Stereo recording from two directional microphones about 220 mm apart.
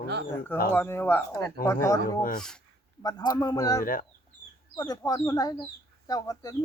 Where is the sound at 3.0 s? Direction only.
20° left (ahead or behind).